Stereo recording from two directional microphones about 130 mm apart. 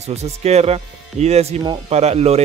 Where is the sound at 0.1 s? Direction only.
55° right (ahead or behind).